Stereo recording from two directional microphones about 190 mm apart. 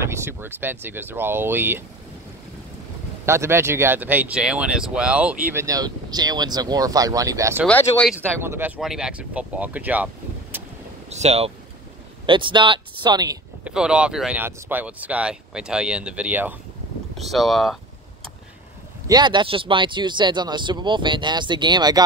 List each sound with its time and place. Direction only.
0.0 s speech: 15° right (ahead or behind)
3.3 s speech: 15° right (ahead or behind)
7.6 s speech: 5° left (ahead or behind)
8.4 s speech: 10° right (ahead or behind)
10.5 s vehicle: 10° right (ahead or behind)
11.1 s speech: 35° right (ahead or behind)
13.7 s speech: 5° right (ahead or behind)
19.0 s speech: 20° right (ahead or behind)